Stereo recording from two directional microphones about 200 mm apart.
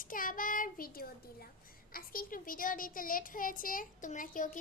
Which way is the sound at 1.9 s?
45° left (ahead or behind).